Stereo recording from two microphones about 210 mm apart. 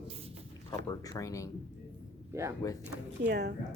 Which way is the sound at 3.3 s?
50° right (ahead or behind).